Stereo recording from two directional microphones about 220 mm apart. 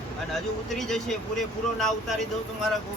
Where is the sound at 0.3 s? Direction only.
Centre (ahead or behind).